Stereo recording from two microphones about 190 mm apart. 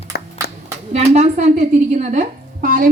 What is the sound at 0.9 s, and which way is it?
A woman's voice, 35° right (ahead or behind).